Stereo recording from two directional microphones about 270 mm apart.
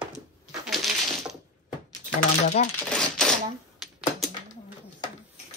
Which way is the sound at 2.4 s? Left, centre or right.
Left.